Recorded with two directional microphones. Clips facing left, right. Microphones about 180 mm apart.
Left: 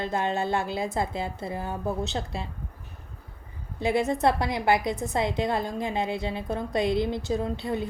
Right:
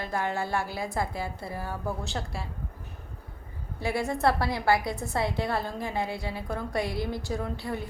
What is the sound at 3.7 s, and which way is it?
A woman's voice, 20° left (ahead or behind).